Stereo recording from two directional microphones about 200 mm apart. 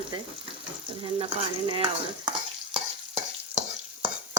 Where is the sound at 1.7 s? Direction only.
25° right (ahead or behind).